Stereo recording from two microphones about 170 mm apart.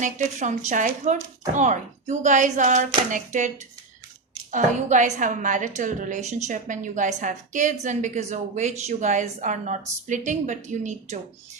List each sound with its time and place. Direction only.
0.0 s a woman's voice: 45° right (ahead or behind)